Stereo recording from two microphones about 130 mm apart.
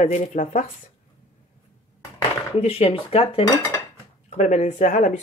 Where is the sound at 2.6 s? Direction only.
50° left (ahead or behind).